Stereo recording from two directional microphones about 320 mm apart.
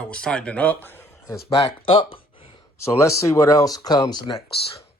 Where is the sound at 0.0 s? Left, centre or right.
Centre.